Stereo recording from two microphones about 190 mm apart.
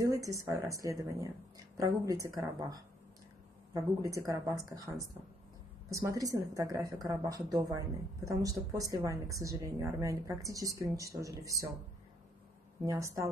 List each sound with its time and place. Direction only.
0.0 s speech: 20° right (ahead or behind)
12.8 s speech: 15° right (ahead or behind)